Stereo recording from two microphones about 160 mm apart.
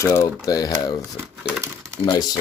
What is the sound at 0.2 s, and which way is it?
Speech, 25° left (ahead or behind).